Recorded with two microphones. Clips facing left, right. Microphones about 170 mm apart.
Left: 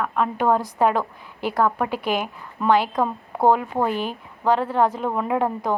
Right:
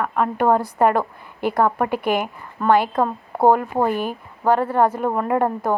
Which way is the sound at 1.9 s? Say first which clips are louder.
Right 3 dB; 55° right (ahead or behind).